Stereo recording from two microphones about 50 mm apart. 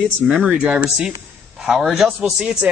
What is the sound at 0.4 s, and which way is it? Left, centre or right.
Speech, right.